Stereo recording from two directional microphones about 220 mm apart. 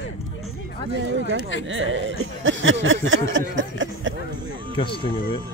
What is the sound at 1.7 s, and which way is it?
Speech, 60° right (ahead or behind).